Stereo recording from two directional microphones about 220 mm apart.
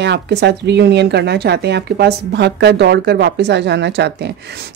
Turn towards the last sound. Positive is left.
turn(degrees=-50)  # may be behind; listen again after turning